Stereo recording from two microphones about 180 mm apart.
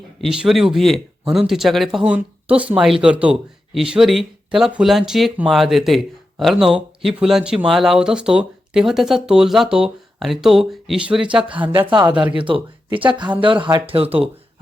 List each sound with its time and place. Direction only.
0.2 s speech: centre (ahead or behind)
11.9 s speech: 25° right (ahead or behind)